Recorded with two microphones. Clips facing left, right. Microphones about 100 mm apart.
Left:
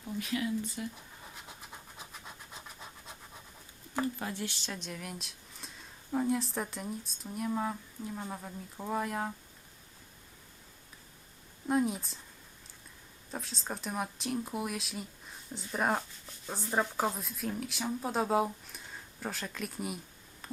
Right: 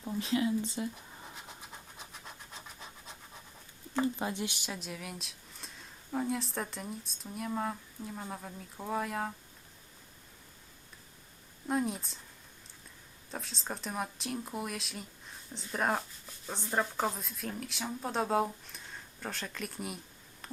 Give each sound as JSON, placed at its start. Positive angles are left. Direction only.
{"t": 0.2, "sound": "speech", "side_deg": -25}
{"t": 1.2, "sound": "scratch", "side_deg": 0}
{"t": 4.0, "sound": "speech", "side_deg": -20}
{"t": 11.7, "sound": "speech", "side_deg": 0}
{"t": 13.3, "sound": "speech", "side_deg": 0}